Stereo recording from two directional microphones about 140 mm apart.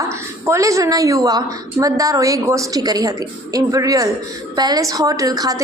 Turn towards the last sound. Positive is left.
turn(degrees=-25)  # may be behind; listen again after turning